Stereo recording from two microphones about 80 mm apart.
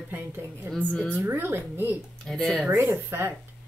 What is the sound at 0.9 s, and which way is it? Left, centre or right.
Speech, centre.